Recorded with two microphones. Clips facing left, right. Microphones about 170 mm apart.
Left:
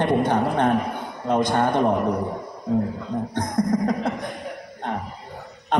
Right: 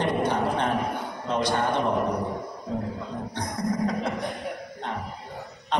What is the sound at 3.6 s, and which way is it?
Music, 50° left (ahead or behind).